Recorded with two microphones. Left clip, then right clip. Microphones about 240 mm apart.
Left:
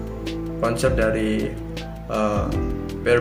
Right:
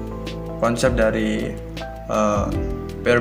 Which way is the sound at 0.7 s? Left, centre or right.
Right.